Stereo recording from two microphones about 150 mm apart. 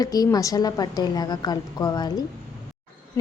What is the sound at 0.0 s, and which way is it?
A woman's voice, 25° left (ahead or behind).